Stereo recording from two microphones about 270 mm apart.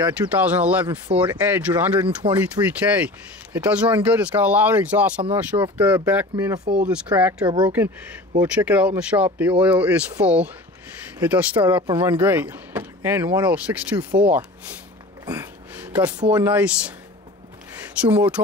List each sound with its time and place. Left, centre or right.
0.4 s speech: centre
15.2 s a sound: centre
16.3 s speech: centre
18.0 s speech: centre